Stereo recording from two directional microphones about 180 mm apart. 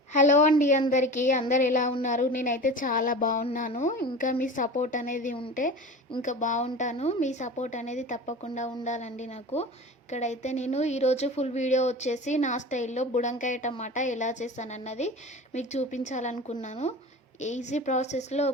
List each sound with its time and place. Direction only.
0.1 s a woman's voice: 45° left (ahead or behind)
3.7 s a woman's voice: 40° left (ahead or behind)